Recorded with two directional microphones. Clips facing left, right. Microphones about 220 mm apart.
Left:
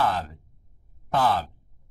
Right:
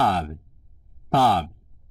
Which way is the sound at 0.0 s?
40° right (ahead or behind).